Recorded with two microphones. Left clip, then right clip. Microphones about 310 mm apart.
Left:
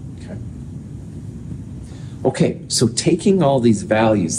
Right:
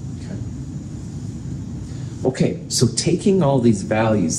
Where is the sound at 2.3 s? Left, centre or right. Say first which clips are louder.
Left 2 dB; left.